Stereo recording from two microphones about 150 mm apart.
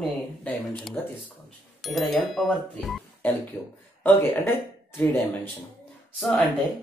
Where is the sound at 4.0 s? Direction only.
15° left (ahead or behind).